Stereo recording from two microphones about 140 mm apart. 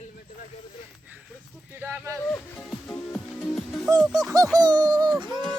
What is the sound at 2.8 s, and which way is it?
Music, 10° left (ahead or behind).